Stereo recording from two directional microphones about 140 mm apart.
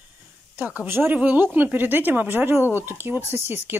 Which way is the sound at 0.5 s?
10° right (ahead or behind).